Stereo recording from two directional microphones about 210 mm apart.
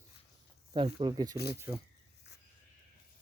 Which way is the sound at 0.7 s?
25° right (ahead or behind).